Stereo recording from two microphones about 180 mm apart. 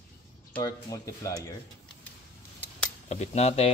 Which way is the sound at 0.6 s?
20° left (ahead or behind).